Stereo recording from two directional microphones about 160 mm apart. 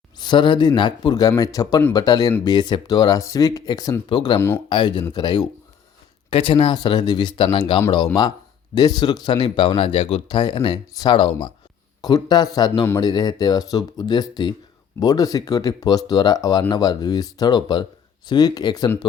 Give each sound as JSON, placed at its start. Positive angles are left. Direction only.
{"t": 0.2, "sound": "speech", "side_deg": 30}
{"t": 4.4, "sound": "speech", "side_deg": 15}
{"t": 4.7, "sound": "speech", "side_deg": 30}